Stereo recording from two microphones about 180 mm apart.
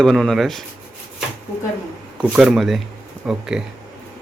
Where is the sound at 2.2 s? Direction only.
5° right (ahead or behind).